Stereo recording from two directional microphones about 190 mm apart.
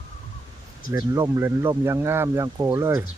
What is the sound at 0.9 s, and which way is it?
Speech, 20° right (ahead or behind).